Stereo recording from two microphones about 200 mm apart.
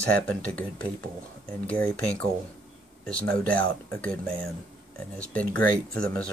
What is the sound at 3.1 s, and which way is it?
Speech, 5° left (ahead or behind).